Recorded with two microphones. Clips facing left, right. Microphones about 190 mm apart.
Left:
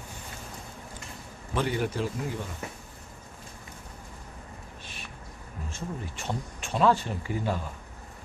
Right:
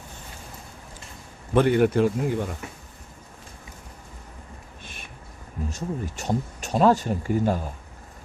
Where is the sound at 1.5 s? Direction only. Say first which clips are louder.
Right 10 dB; 60° right (ahead or behind).